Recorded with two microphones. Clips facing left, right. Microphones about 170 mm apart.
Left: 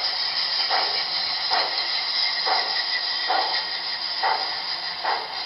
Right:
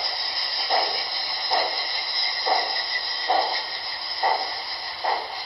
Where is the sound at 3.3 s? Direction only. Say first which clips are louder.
Right 2 dB; 20° right (ahead or behind).